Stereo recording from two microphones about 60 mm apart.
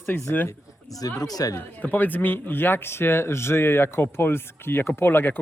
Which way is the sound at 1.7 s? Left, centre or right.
Left.